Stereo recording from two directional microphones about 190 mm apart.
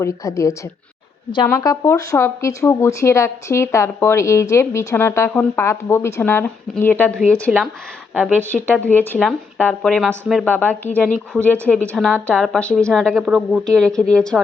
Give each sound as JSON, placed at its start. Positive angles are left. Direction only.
{"t": 0.0, "sound": "a woman's voice", "side_deg": 15}
{"t": 8.1, "sound": "speech", "side_deg": -5}
{"t": 8.4, "sound": "a woman's voice", "side_deg": 10}